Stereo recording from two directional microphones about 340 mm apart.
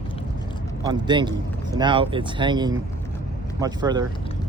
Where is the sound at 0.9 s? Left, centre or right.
Centre.